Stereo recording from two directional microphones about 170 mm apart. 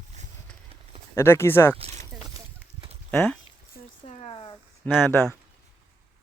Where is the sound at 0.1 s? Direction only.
45° right (ahead or behind).